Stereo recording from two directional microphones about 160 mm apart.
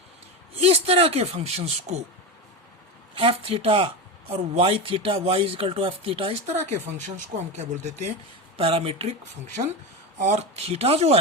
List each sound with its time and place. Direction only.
0.6 s speech: 40° right (ahead or behind)
3.2 s speech: 35° right (ahead or behind)
10.2 s speech: 45° right (ahead or behind)